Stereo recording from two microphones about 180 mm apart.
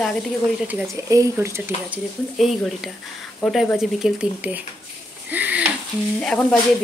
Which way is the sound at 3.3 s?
10° left (ahead or behind).